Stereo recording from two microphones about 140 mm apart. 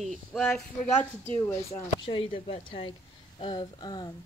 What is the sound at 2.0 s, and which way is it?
Speech, 40° left (ahead or behind).